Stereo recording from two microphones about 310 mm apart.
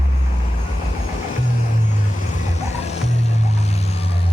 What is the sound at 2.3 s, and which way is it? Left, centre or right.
Vehicle, left.